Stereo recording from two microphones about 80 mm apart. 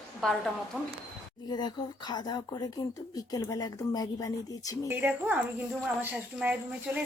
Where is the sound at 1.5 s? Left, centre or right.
Left.